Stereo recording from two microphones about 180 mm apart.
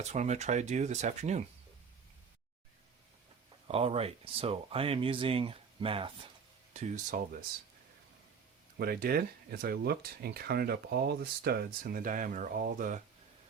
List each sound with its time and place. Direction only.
0.0 s speech: 40° right (ahead or behind)
3.7 s speech: 35° right (ahead or behind)
6.7 s speech: 40° right (ahead or behind)
8.8 s speech: 55° right (ahead or behind)